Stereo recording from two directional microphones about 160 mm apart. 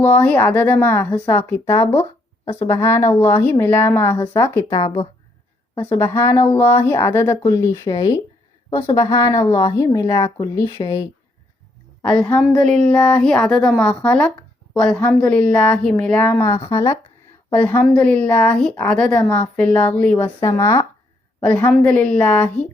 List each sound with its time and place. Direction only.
0.0 s a woman's voice: 10° left (ahead or behind)
4.8 s speech: 35° left (ahead or behind)
5.7 s a woman's voice: 10° left (ahead or behind); by 11.0 s 25° left (ahead or behind)
12.0 s a woman's voice: 5° left (ahead or behind)
17.5 s a woman's voice: 10° left (ahead or behind)
21.4 s a woman's voice: 10° left (ahead or behind)